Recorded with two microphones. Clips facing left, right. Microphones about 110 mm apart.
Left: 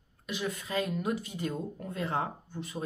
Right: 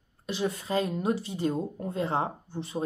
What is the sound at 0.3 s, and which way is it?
Speech, 30° right (ahead or behind).